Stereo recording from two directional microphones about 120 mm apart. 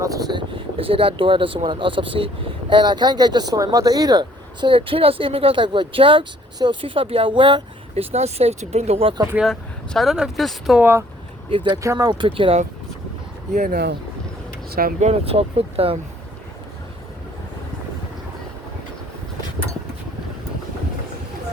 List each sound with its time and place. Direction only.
0.0 s speech: 30° right (ahead or behind)
0.8 s speech: 50° right (ahead or behind)
8.1 s speech: 60° right (ahead or behind)
9.5 s speech: centre (ahead or behind)
10.8 s speech: 15° right (ahead or behind)
11.4 s speech: 45° right (ahead or behind)
11.8 s speech: 25° right (ahead or behind)
12.1 s speech: 45° right (ahead or behind)
13.5 s speech: 90° right
15.0 s speech: 55° right (ahead or behind)